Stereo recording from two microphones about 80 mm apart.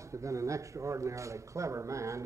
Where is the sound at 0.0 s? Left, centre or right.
Right.